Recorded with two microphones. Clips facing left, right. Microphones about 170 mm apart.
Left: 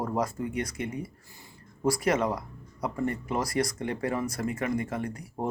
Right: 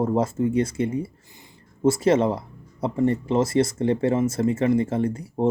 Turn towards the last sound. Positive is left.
turn(degrees=-25)  # may be behind; listen again after turning